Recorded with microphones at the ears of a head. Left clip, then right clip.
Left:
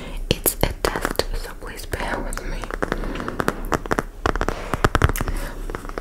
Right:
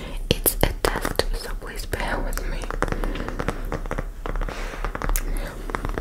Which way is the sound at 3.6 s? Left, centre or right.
Left.